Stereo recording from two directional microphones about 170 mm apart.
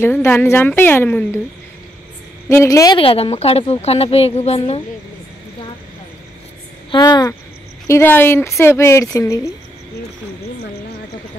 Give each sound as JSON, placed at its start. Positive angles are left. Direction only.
{"t": 0.0, "sound": "speech", "side_deg": 15}
{"t": 2.5, "sound": "a woman's voice", "side_deg": 15}
{"t": 3.0, "sound": "a woman's voice", "side_deg": 35}
{"t": 6.9, "sound": "a woman's voice", "side_deg": 25}